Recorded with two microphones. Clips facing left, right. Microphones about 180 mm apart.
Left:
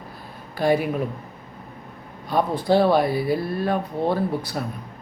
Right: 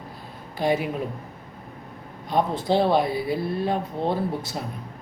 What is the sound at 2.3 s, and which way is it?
Speech, 20° right (ahead or behind).